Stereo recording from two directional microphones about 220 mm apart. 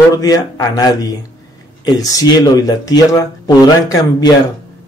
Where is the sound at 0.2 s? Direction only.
15° left (ahead or behind).